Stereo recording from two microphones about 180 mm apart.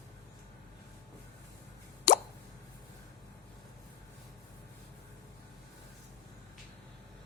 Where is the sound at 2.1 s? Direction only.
55° left (ahead or behind).